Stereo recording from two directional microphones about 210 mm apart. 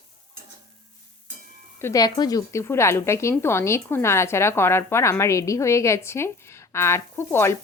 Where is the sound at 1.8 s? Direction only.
15° left (ahead or behind).